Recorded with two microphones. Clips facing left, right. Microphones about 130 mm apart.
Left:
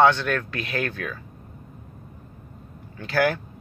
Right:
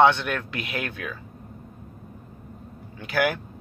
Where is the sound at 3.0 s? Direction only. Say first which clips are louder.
Left 2 dB; 15° right (ahead or behind).